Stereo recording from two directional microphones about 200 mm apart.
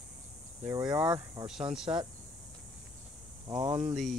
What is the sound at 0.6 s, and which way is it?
Speech, 20° right (ahead or behind).